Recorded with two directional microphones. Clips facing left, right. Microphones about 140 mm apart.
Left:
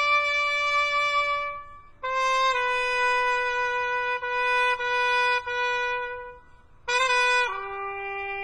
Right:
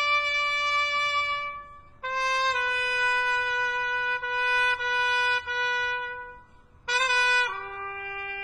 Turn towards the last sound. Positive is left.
turn(degrees=45)  # may be behind; listen again after turning